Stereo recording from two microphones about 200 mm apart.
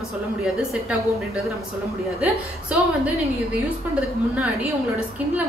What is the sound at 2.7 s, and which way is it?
Speech, 5° right (ahead or behind).